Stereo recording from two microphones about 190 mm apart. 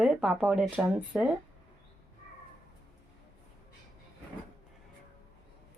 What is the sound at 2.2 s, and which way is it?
Cat, 35° left (ahead or behind).